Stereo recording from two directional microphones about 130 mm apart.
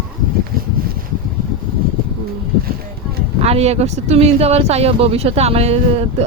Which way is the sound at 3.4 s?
55° right (ahead or behind).